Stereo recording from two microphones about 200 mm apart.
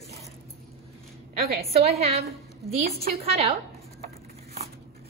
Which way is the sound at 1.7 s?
30° right (ahead or behind).